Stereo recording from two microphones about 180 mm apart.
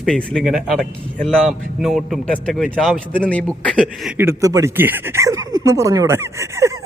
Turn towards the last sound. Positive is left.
turn(degrees=-15)  # may be behind; listen again after turning